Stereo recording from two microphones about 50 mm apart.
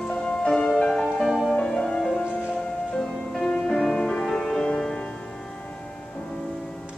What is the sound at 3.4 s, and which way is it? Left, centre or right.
Music, centre.